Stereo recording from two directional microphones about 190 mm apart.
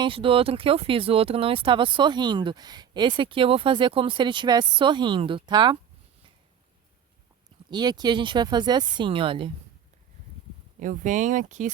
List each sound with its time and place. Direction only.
0.0 s speech: 30° right (ahead or behind)
7.7 s speech: 20° right (ahead or behind)
10.8 s speech: 40° right (ahead or behind)